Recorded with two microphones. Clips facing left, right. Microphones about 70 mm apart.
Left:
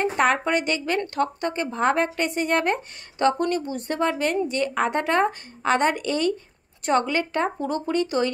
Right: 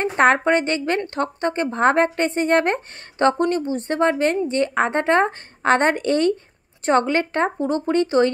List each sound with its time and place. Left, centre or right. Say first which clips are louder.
0.0 s a woman's voice: right 4 dB; right